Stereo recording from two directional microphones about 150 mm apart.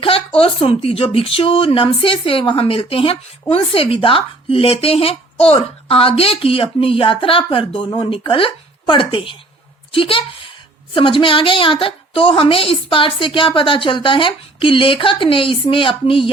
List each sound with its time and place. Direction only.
0.3 s a woman's voice: 40° left (ahead or behind)